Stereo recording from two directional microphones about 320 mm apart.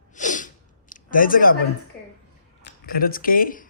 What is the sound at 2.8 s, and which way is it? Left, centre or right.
Speech, left.